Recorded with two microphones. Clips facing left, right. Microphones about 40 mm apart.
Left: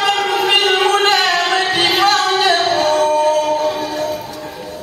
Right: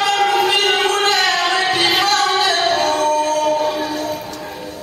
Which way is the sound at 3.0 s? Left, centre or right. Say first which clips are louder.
Left 3 dB; centre.